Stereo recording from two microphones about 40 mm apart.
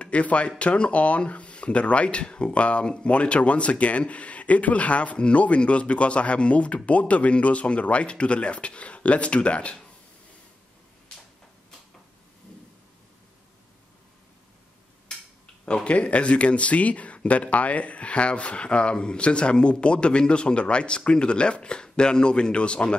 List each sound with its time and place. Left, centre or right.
0.0 s speech: left
15.6 s speech: left